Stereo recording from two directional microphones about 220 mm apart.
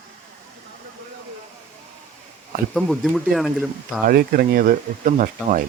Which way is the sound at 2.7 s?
Centre (ahead or behind).